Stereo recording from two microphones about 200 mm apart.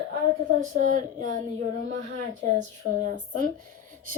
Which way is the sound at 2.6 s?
40° right (ahead or behind).